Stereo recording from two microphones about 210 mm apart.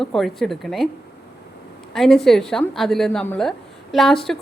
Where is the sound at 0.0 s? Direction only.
Centre (ahead or behind).